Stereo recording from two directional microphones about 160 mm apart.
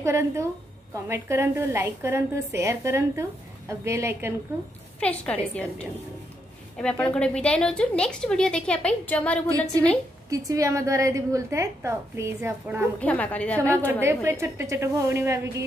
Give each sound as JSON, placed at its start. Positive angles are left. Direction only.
{"t": 0.0, "sound": "a woman's voice", "side_deg": -20}
{"t": 5.0, "sound": "a woman's voice", "side_deg": 10}
{"t": 10.3, "sound": "a woman's voice", "side_deg": -20}
{"t": 13.0, "sound": "a woman's voice", "side_deg": 10}
{"t": 13.8, "sound": "a woman's voice", "side_deg": -15}